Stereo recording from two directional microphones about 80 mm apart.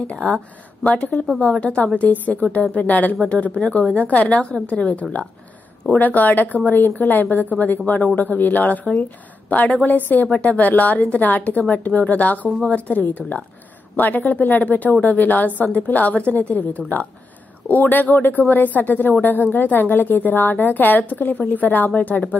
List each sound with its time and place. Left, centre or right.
0.0 s a woman's voice: centre